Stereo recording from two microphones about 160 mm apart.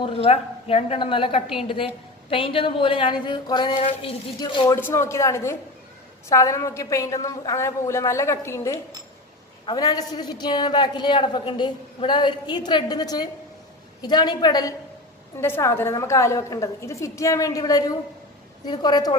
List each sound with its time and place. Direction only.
0.0 s a woman's voice: 35° left (ahead or behind)
3.7 s a sound: 45° left (ahead or behind)
4.4 s a woman's voice: 30° left (ahead or behind)
4.7 s a woman's voice: 15° left (ahead or behind)